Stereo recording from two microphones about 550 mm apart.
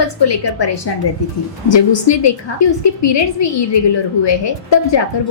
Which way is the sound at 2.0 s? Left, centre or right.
Left.